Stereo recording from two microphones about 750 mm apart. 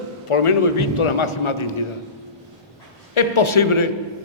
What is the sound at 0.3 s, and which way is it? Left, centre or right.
A man's voice, left.